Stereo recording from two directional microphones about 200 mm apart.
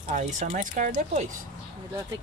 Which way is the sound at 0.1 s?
40° right (ahead or behind).